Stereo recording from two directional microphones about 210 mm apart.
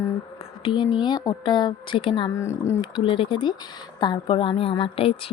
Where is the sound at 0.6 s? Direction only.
25° left (ahead or behind).